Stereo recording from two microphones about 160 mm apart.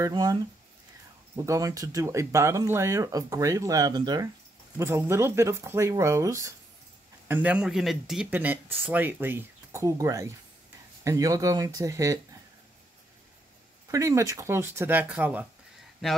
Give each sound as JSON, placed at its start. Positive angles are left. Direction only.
{"t": 0.0, "sound": "speech", "side_deg": -25}
{"t": 13.8, "sound": "speech", "side_deg": -20}